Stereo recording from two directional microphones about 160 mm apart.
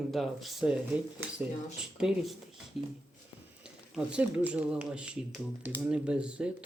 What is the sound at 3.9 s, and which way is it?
Speech, 5° right (ahead or behind).